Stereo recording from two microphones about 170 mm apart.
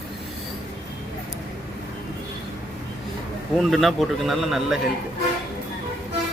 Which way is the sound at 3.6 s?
Centre (ahead or behind).